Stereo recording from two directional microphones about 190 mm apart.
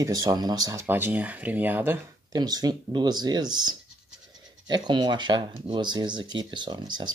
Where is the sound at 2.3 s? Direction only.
20° right (ahead or behind).